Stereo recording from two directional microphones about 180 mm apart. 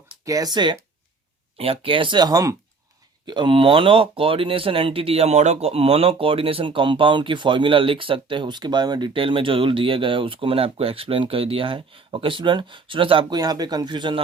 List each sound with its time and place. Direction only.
0.3 s speech: 20° right (ahead or behind)